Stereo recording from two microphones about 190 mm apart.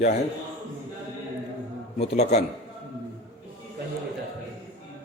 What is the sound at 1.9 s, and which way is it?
Speech, 35° left (ahead or behind).